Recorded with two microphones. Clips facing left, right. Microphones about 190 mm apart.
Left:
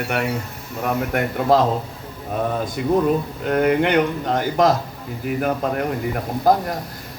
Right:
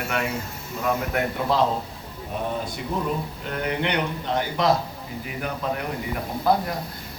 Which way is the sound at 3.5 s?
50° left (ahead or behind).